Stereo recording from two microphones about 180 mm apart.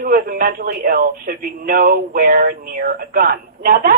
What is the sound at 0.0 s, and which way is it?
A man's voice, 50° right (ahead or behind).